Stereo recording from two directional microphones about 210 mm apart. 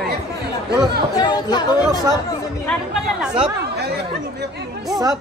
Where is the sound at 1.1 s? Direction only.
20° left (ahead or behind).